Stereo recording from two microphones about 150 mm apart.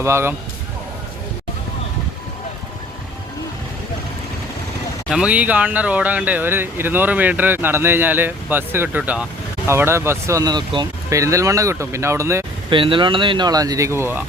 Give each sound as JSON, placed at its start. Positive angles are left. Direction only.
{"t": 0.0, "sound": "speech", "side_deg": -15}
{"t": 5.0, "sound": "speech", "side_deg": -5}
{"t": 12.7, "sound": "speech", "side_deg": -35}